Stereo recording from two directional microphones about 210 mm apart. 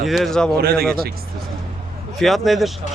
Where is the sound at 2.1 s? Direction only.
Centre (ahead or behind).